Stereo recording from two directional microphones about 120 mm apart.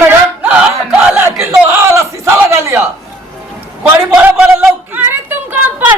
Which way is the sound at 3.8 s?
10° right (ahead or behind).